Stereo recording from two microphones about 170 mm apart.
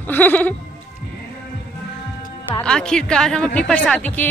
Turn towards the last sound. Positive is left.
turn(degrees=10)  # may be behind; listen again after turning